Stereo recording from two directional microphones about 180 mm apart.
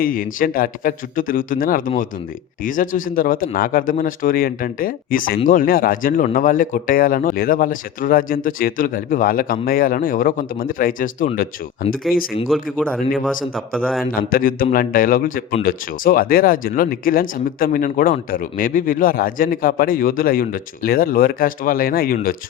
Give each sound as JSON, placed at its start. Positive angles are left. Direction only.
{"t": 0.0, "sound": "speech", "side_deg": 50}
{"t": 12.6, "sound": "speech", "side_deg": 5}
{"t": 14.0, "sound": "speech", "side_deg": 50}